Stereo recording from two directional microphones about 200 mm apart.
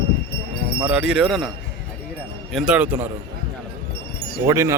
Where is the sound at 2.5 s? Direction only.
5° right (ahead or behind).